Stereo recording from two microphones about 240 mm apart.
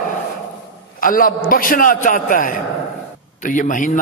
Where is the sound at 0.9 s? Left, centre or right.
Left.